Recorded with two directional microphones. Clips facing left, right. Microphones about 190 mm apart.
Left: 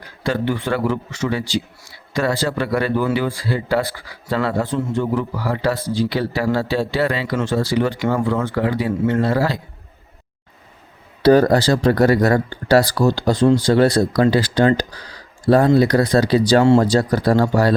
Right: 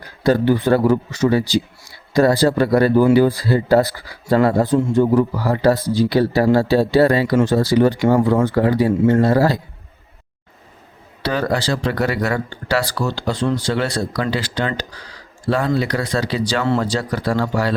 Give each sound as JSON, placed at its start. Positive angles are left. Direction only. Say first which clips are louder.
{"t": 0.2, "sound": "speech", "louder": "right 6 dB", "side_deg": -40}
{"t": 11.2, "sound": "speech", "louder": "left 8 dB", "side_deg": 40}